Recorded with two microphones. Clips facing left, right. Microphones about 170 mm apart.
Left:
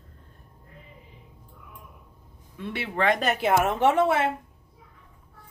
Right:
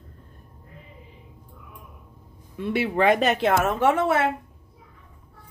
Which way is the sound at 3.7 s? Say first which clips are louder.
Even; 20° left (ahead or behind).